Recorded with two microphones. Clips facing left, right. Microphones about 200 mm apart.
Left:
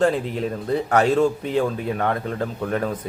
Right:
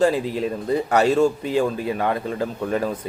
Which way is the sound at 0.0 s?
5° right (ahead or behind).